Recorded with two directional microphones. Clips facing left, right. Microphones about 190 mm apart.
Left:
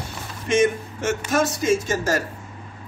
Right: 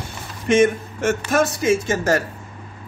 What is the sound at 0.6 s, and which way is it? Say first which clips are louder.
Speech: right 2 dB; 55° right (ahead or behind).